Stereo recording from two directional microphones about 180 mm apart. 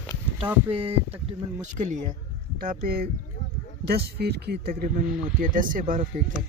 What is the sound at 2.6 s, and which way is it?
Speech, 55° right (ahead or behind).